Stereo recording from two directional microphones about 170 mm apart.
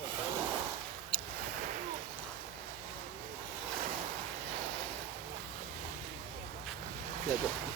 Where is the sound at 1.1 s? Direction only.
5° left (ahead or behind).